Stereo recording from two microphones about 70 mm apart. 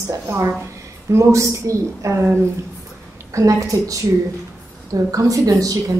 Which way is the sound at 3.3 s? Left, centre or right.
Right.